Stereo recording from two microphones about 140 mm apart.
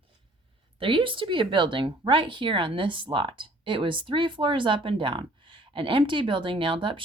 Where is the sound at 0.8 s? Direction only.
40° right (ahead or behind).